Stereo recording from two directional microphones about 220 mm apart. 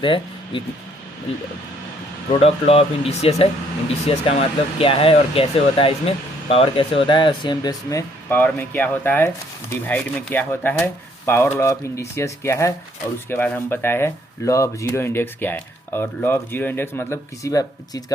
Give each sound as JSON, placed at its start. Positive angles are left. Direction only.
{"t": 0.0, "sound": "speech", "side_deg": 20}
{"t": 2.3, "sound": "speech", "side_deg": 25}